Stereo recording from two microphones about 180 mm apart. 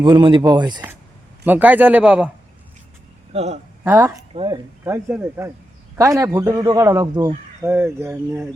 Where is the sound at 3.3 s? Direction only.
35° right (ahead or behind).